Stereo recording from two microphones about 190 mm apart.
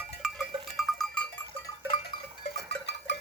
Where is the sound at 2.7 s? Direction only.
65° left (ahead or behind).